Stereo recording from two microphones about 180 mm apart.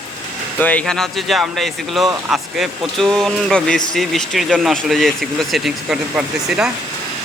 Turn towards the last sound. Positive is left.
turn(degrees=-5)  # may be behind; listen again after turning